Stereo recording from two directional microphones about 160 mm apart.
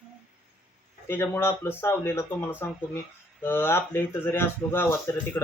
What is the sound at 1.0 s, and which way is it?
Speech, 15° left (ahead or behind).